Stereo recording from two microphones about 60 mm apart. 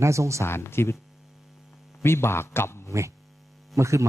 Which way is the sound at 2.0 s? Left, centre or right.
Left.